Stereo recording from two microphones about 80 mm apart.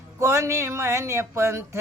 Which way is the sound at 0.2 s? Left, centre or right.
Right.